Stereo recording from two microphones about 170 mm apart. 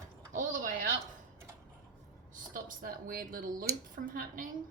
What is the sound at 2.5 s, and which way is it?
Speech, 55° right (ahead or behind).